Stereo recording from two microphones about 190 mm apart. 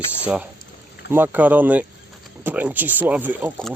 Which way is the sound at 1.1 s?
10° right (ahead or behind).